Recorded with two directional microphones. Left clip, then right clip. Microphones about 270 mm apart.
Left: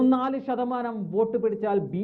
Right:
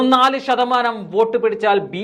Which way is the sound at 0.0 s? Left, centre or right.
Centre.